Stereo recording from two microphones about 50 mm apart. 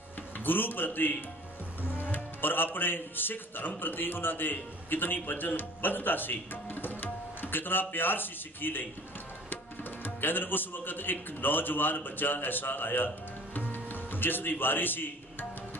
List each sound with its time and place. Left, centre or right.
0.4 s a man's voice: left
10.0 s a man's voice: left
13.6 s music: left